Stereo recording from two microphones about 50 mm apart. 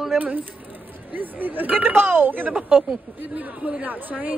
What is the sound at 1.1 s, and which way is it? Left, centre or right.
Speech, right.